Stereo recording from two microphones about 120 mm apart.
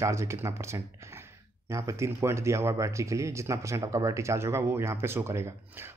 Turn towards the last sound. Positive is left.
turn(degrees=-20)  # may be behind; listen again after turning